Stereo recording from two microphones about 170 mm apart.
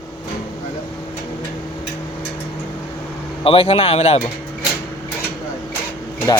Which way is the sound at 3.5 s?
35° left (ahead or behind).